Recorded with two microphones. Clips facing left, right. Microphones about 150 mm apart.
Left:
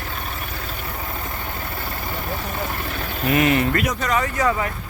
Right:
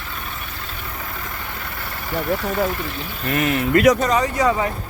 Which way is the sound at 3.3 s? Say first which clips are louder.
Left 2 dB; centre (ahead or behind).